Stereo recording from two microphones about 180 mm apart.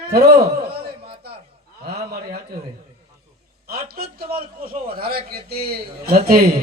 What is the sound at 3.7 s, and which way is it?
A man's voice, 60° right (ahead or behind).